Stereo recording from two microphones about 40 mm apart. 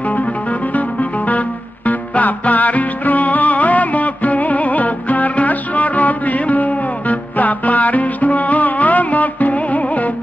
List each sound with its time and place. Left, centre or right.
0.0 s music: left